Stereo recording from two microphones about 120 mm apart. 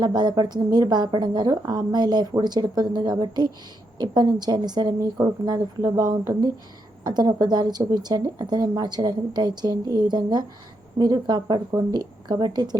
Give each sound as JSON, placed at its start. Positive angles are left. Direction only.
{"t": 0.0, "sound": "a woman's voice", "side_deg": -35}